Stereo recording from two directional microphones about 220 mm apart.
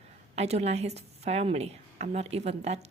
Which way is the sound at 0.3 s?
30° right (ahead or behind).